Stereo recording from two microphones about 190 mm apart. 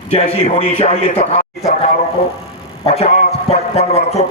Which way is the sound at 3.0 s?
40° left (ahead or behind).